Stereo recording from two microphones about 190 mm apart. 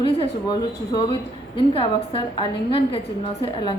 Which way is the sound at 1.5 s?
25° left (ahead or behind).